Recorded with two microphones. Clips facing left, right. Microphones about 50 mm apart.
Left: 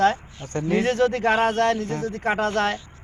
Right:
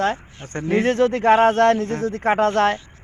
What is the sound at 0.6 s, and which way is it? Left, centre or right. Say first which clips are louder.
A man's voice: right 3 dB; right.